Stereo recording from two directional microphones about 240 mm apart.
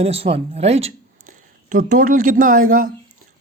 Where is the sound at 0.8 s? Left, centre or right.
Right.